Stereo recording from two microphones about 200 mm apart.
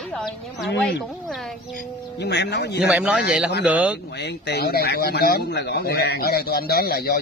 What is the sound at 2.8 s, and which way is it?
A man's voice, 5° right (ahead or behind).